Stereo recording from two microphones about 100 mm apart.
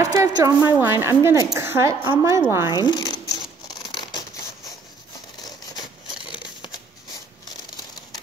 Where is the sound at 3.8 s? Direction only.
45° left (ahead or behind).